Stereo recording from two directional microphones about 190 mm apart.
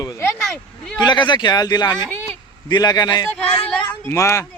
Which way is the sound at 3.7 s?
15° left (ahead or behind).